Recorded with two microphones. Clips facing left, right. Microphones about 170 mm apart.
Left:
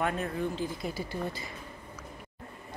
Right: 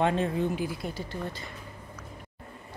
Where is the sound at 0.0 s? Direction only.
25° right (ahead or behind).